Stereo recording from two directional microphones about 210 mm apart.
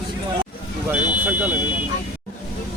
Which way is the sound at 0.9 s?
5° right (ahead or behind).